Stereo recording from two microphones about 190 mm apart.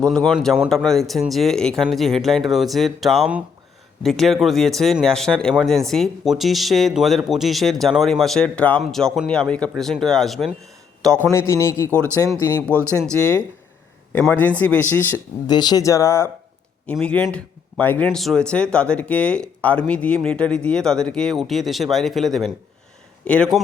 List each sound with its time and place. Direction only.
0.1 s speech: centre (ahead or behind)
11.3 s speech: 15° left (ahead or behind)
14.1 s speech: 10° left (ahead or behind)
15.4 s speech: 20° left (ahead or behind); by 23.6 s centre (ahead or behind)